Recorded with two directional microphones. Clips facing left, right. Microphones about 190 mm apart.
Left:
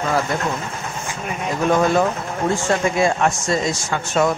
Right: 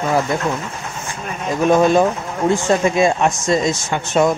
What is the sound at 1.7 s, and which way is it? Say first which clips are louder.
Speech: right 4 dB; 20° right (ahead or behind).